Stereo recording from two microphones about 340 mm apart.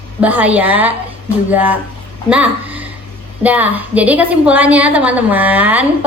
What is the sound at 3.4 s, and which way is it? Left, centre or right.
A child's voice, centre.